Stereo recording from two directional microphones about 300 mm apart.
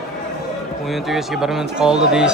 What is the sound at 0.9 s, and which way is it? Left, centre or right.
Speech, centre.